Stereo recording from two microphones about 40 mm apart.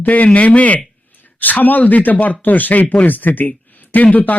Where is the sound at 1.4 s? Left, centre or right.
Left.